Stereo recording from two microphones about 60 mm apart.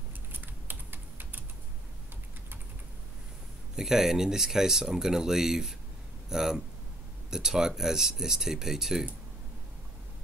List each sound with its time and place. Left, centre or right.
0.3 s typing: right
3.7 s speech: centre